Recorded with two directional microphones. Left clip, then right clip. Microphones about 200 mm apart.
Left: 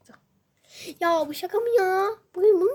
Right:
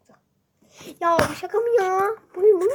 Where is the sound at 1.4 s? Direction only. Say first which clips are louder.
Right 2 dB; 40° left (ahead or behind).